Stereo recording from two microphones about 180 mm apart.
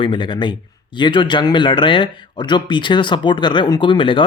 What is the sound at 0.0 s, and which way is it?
Speech, 25° left (ahead or behind).